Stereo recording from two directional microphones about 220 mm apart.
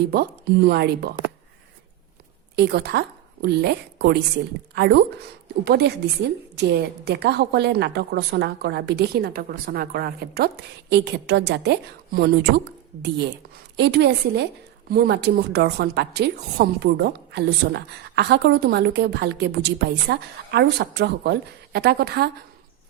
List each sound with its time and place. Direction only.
0.1 s a woman's voice: 45° right (ahead or behind)
2.6 s a woman's voice: 50° right (ahead or behind)